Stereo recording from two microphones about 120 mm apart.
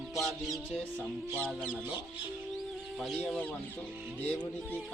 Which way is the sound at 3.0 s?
5° left (ahead or behind).